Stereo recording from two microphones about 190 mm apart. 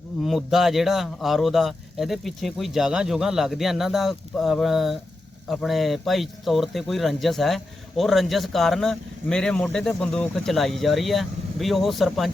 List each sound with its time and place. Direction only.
0.2 s speech: centre (ahead or behind)